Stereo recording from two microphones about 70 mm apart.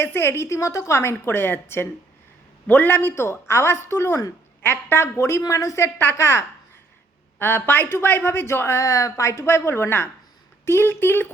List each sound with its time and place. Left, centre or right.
0.0 s a woman's voice: left
8.8 s a woman's voice: left